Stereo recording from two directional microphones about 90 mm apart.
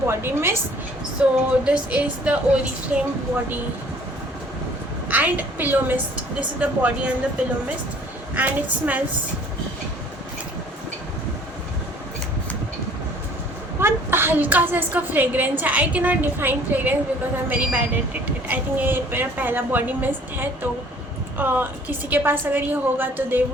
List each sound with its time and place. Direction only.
0.1 s a woman's voice: 25° right (ahead or behind)
1.2 s a woman's voice: 10° right (ahead or behind)
5.0 s a woman's voice: 15° right (ahead or behind)
8.4 s a woman's voice: 20° right (ahead or behind)
13.7 s a woman's voice: 25° right (ahead or behind)